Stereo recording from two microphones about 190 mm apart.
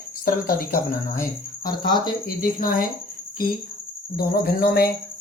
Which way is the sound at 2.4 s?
45° left (ahead or behind).